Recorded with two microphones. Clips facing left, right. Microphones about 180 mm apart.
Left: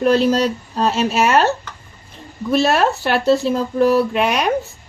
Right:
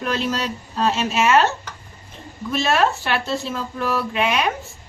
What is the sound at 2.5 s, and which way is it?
Speech, 40° left (ahead or behind).